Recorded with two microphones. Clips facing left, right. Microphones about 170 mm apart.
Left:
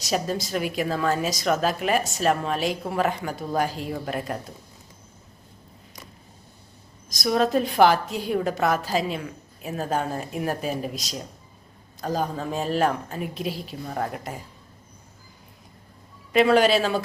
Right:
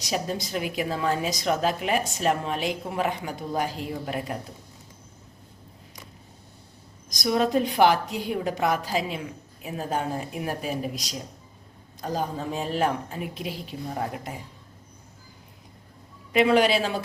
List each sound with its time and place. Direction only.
0.0 s a woman's voice: 15° right (ahead or behind)
7.1 s a woman's voice: 15° right (ahead or behind)
16.3 s a woman's voice: 15° right (ahead or behind)